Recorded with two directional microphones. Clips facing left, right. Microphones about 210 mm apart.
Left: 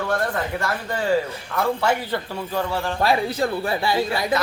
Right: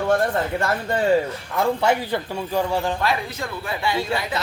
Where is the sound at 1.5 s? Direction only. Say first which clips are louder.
Right 2 dB; 15° right (ahead or behind).